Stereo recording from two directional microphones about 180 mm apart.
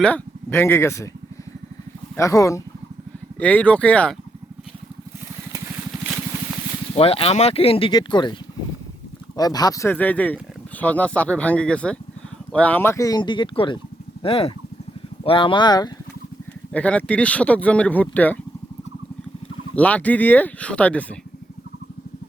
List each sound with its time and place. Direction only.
0.0 s speech: 10° left (ahead or behind)
2.1 s speech: 20° left (ahead or behind)
3.3 s speech: 5° left (ahead or behind)
5.5 s vehicle: 15° right (ahead or behind)
6.9 s speech: 35° left (ahead or behind)
16.7 s speech: 5° left (ahead or behind)
19.7 s speech: 5° left (ahead or behind)